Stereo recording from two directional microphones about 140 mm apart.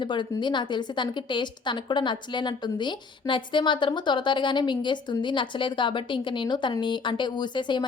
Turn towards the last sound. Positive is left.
turn(degrees=35)  # may be behind; listen again after turning